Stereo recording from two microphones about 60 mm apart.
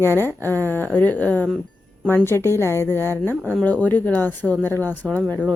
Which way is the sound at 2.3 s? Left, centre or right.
Left.